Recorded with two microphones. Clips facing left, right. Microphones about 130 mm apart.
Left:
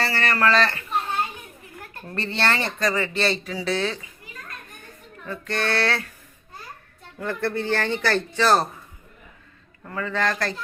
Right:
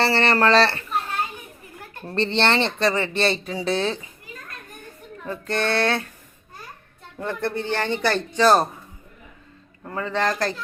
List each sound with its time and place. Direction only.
0.0 s speech: 25° right (ahead or behind)
2.0 s speech: 25° right (ahead or behind)
5.3 s speech: 25° right (ahead or behind)
7.2 s speech: 20° right (ahead or behind)
9.8 s speech: 25° right (ahead or behind)